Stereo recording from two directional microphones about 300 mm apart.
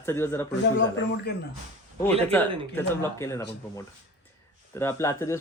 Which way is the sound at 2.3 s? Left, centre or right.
Centre.